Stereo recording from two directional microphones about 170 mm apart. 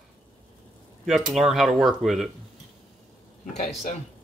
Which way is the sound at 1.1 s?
Centre (ahead or behind).